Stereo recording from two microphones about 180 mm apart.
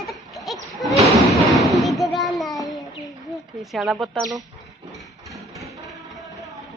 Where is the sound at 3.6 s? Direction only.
Centre (ahead or behind).